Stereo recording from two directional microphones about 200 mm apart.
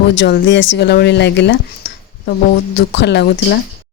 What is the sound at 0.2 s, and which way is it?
Speech, 60° left (ahead or behind).